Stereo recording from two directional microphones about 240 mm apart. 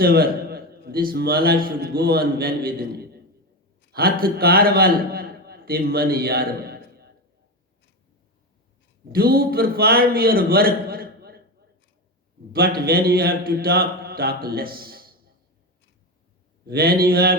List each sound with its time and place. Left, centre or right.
0.0 s a man's voice: right
9.1 s a man's voice: right
12.5 s a man's voice: right
16.6 s a man's voice: right